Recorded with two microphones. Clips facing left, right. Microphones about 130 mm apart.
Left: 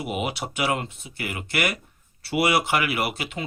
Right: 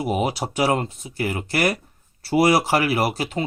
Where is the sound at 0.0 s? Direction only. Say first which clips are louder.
Right 5 dB; 40° right (ahead or behind).